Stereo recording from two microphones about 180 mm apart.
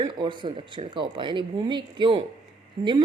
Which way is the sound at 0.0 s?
25° right (ahead or behind).